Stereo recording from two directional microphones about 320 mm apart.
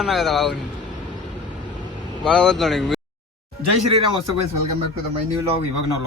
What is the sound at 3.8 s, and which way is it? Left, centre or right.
Speech, right.